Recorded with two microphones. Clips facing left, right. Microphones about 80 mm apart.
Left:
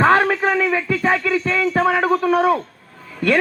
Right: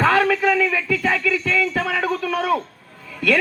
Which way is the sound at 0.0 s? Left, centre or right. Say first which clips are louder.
Left 2 dB; left.